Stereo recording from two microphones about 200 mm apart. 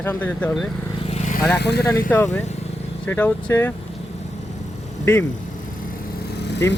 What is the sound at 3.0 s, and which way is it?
Speech, 10° left (ahead or behind).